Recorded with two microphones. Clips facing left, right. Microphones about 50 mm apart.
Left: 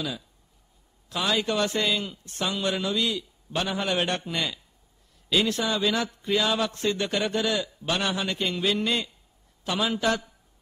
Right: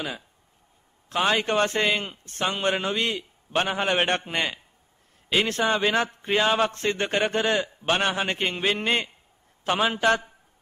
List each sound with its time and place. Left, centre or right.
1.0 s a man's voice: right